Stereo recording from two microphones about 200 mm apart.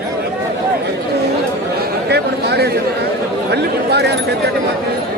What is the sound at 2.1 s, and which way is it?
A man's voice, 55° right (ahead or behind).